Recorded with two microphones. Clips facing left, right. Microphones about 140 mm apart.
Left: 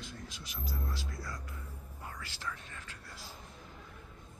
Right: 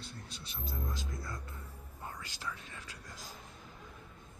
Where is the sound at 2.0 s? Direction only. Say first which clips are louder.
Even; 20° right (ahead or behind).